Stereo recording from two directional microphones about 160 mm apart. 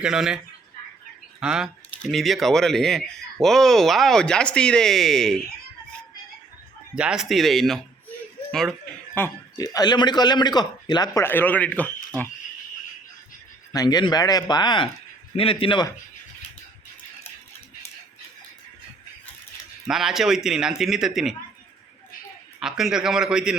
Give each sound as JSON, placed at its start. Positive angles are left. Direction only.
{"t": 0.0, "sound": "speech", "side_deg": -5}
{"t": 1.4, "sound": "speech", "side_deg": -5}
{"t": 6.9, "sound": "speech", "side_deg": -5}
{"t": 9.1, "sound": "speech", "side_deg": 20}
{"t": 13.7, "sound": "speech", "side_deg": 25}
{"t": 19.9, "sound": "speech", "side_deg": 0}
{"t": 22.6, "sound": "speech", "side_deg": -5}